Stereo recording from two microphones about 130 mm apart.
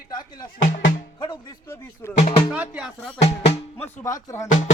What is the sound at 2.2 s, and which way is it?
Music, 60° left (ahead or behind).